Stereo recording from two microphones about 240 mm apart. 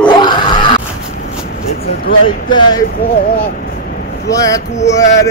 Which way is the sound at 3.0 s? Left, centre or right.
Left.